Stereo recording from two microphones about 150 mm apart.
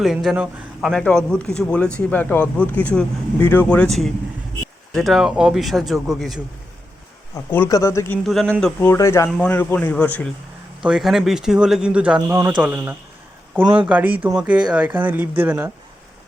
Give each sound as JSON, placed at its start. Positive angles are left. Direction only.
{"t": 0.0, "sound": "speech", "side_deg": -5}
{"t": 4.9, "sound": "speech", "side_deg": 0}
{"t": 7.3, "sound": "speech", "side_deg": 20}
{"t": 8.3, "sound": "speech", "side_deg": 0}
{"t": 8.8, "sound": "speech", "side_deg": 20}
{"t": 10.8, "sound": "speech", "side_deg": -5}